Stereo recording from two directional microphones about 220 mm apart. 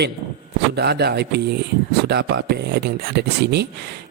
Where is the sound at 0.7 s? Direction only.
45° right (ahead or behind).